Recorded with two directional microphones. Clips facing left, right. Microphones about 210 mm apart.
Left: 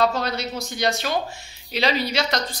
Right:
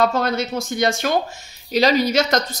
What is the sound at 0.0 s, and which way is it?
Speech, 50° right (ahead or behind).